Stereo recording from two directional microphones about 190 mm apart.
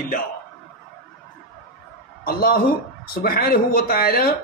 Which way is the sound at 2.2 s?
55° left (ahead or behind).